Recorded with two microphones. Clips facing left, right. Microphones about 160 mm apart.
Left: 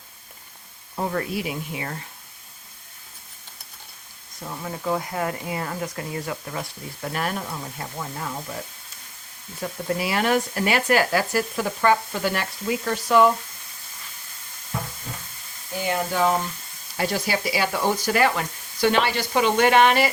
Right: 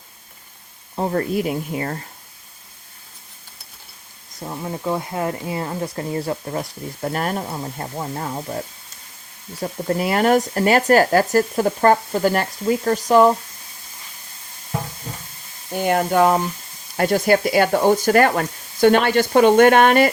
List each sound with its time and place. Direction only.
0.9 s speech: 35° right (ahead or behind)
4.4 s speech: 20° right (ahead or behind); by 8.5 s 35° right (ahead or behind)
9.6 s speech: 40° right (ahead or behind)
15.7 s speech: 55° right (ahead or behind)